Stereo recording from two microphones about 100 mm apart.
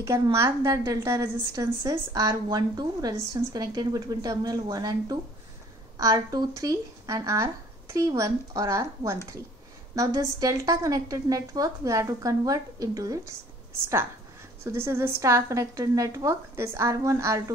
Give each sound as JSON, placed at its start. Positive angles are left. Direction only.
{"t": 0.0, "sound": "a woman's voice", "side_deg": -30}
{"t": 14.6, "sound": "a woman's voice", "side_deg": -25}